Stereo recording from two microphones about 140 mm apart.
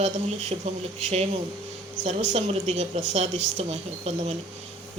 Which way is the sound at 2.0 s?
55° right (ahead or behind).